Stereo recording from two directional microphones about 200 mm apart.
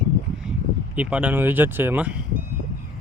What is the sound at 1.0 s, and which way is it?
Speech, 5° right (ahead or behind).